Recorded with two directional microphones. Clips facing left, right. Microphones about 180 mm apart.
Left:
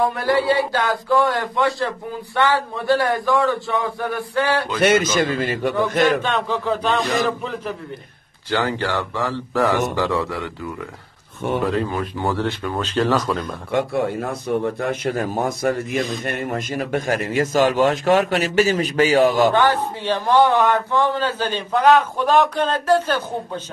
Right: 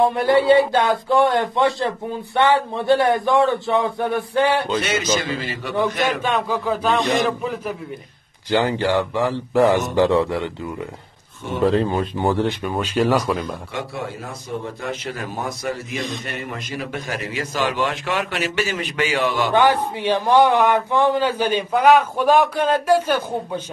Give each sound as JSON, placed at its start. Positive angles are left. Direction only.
{"t": 0.0, "sound": "a man's voice", "side_deg": -25}
{"t": 4.7, "sound": "a man's voice", "side_deg": 55}
{"t": 6.2, "sound": "a man's voice", "side_deg": -5}
{"t": 8.5, "sound": "a man's voice", "side_deg": -15}
{"t": 13.7, "sound": "a man's voice", "side_deg": 55}
{"t": 19.5, "sound": "a man's voice", "side_deg": -15}